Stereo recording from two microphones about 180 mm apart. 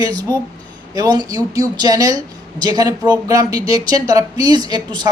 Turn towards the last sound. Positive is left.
turn(degrees=-25)  # may be behind; listen again after turning